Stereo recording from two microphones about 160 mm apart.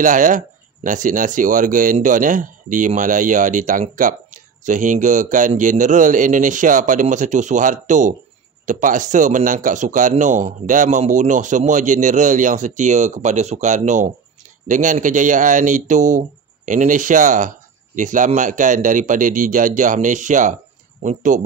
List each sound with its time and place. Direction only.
0.0 s speech: 55° right (ahead or behind)